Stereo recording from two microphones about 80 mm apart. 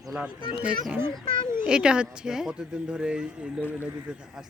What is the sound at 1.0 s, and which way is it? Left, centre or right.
Speech, left.